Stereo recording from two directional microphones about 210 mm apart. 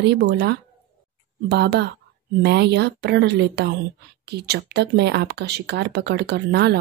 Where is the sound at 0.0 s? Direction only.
55° right (ahead or behind).